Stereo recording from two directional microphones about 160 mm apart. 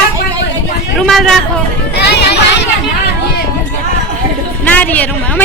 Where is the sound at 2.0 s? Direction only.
90° left.